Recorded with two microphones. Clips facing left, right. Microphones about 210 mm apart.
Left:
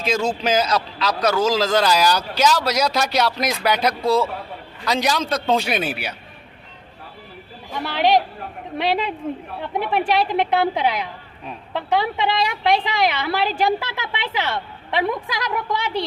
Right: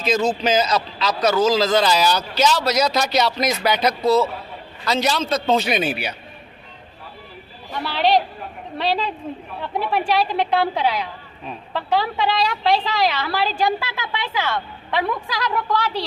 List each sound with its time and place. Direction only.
0.0 s speech: 10° left (ahead or behind)
7.7 s a woman's voice: 15° left (ahead or behind)